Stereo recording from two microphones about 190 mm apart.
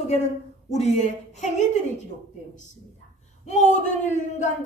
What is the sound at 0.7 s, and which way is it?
Speech, 35° left (ahead or behind).